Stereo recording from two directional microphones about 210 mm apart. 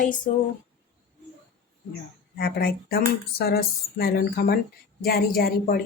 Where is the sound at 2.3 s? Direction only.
50° left (ahead or behind).